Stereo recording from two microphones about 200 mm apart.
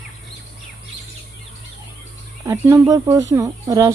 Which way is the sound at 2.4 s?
15° right (ahead or behind).